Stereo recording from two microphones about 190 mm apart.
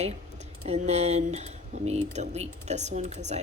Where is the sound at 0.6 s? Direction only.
35° right (ahead or behind).